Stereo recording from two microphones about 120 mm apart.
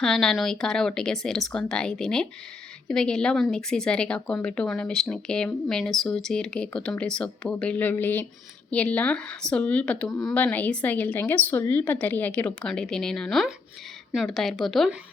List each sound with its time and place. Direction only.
0.0 s speech: 5° left (ahead or behind)
10.3 s speech: 15° left (ahead or behind)